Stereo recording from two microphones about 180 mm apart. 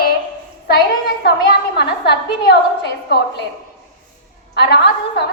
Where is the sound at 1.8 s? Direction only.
65° left (ahead or behind).